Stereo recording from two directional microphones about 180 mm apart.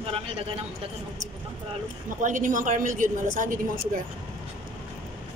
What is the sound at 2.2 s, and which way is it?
A woman's voice, 45° right (ahead or behind).